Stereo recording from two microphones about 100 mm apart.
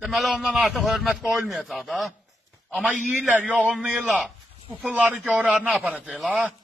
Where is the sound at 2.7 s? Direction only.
10° right (ahead or behind).